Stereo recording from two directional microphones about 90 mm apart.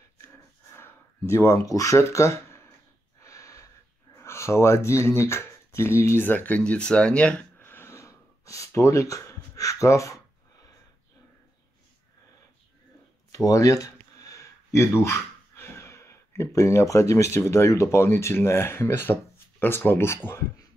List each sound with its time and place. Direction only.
0.7 s a sound: 30° left (ahead or behind)
3.2 s wheeze: 35° left (ahead or behind)
13.3 s speech: 40° left (ahead or behind)